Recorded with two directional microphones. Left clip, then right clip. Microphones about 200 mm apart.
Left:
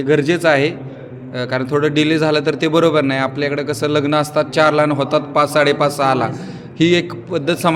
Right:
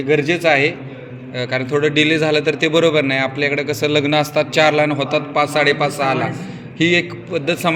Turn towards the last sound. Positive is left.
turn(degrees=15)  # may be behind; listen again after turning